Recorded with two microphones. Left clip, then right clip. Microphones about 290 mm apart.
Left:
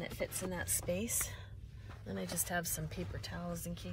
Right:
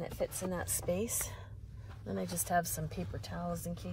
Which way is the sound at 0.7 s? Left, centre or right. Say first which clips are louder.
Right 3 dB; centre.